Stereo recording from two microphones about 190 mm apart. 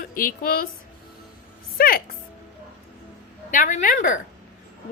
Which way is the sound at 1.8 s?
50° left (ahead or behind).